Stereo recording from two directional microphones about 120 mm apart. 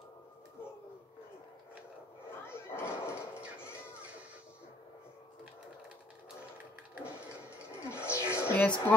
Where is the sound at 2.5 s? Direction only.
20° left (ahead or behind).